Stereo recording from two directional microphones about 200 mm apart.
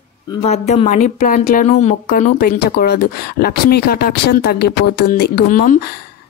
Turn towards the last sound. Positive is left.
turn(degrees=40)  # may be behind; listen again after turning